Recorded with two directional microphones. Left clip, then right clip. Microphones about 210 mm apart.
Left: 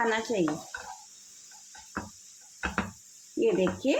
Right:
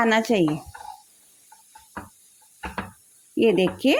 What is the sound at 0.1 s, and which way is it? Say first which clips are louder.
Speech: right 8 dB; 40° right (ahead or behind).